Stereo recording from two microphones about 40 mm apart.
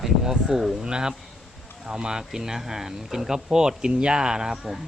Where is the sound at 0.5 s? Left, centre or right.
Centre.